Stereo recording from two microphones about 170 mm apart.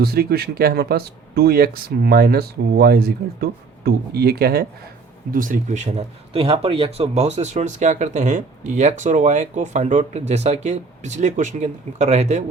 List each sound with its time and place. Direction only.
0.0 s speech: 65° right (ahead or behind)
5.3 s speech: 50° right (ahead or behind)